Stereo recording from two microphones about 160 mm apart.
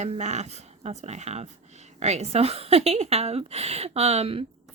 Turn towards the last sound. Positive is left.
turn(degrees=-40)  # may be behind; listen again after turning